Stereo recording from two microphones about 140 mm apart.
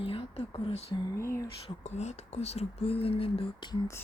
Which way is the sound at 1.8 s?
55° left (ahead or behind).